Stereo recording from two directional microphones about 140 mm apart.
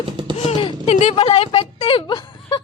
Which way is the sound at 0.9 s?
50° left (ahead or behind).